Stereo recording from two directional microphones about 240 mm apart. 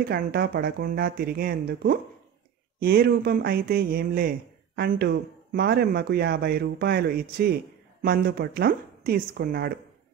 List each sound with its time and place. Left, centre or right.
0.0 s speech: right